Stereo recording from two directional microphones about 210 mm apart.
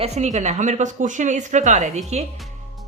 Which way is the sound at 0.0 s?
30° right (ahead or behind).